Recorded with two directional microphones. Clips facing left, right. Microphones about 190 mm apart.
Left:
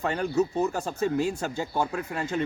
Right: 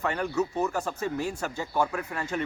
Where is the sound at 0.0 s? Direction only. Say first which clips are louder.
Left 2 dB; 30° left (ahead or behind).